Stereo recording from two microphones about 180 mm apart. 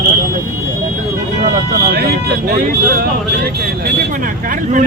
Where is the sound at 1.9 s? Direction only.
60° right (ahead or behind).